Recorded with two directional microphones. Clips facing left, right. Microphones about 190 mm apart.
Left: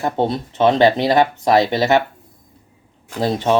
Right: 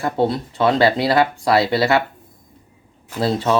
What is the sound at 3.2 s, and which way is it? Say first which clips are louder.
Speech: left 1 dB; 15° left (ahead or behind).